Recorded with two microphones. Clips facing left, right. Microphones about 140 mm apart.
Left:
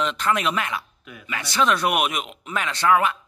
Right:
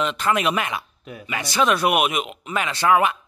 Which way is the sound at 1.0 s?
35° right (ahead or behind).